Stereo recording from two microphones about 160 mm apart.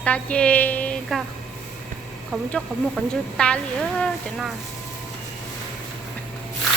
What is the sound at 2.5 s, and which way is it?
Speech, 5° left (ahead or behind).